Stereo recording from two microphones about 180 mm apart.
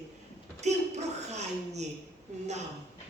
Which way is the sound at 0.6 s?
40° right (ahead or behind).